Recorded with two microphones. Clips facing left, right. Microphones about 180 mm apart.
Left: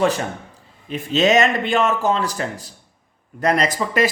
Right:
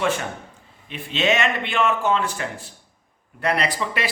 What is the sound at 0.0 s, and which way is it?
Speech, 35° left (ahead or behind).